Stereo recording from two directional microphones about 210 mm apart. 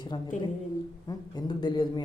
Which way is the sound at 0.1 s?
20° left (ahead or behind).